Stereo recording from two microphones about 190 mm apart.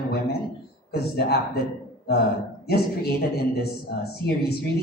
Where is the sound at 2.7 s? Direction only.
55° left (ahead or behind).